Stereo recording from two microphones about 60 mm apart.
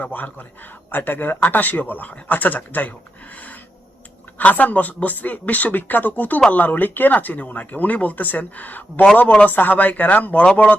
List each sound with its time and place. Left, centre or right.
0.0 s speech: left
3.3 s a sound: left
4.4 s speech: left
9.5 s speech: left